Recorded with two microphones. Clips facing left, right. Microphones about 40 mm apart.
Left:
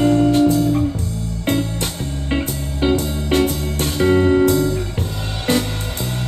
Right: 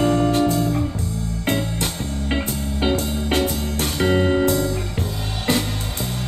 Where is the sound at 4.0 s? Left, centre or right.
Right.